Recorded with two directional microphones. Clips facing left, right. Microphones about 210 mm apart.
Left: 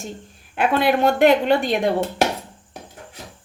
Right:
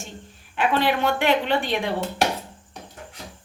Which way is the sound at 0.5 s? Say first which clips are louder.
Left 3 dB; 45° left (ahead or behind).